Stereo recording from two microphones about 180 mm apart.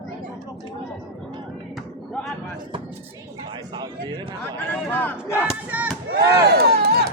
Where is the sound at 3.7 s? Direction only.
25° right (ahead or behind).